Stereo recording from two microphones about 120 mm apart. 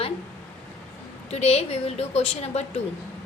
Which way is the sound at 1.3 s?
60° left (ahead or behind).